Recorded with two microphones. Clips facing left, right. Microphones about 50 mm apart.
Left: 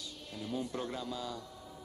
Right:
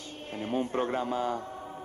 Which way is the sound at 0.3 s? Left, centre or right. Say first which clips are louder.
Right 8 dB; right.